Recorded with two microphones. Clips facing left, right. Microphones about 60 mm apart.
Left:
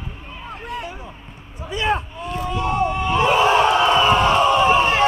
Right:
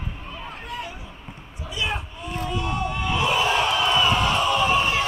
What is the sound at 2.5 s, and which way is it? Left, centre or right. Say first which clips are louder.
Crowd: left 7 dB; left.